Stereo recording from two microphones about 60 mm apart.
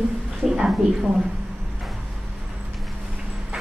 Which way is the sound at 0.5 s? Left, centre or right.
Centre.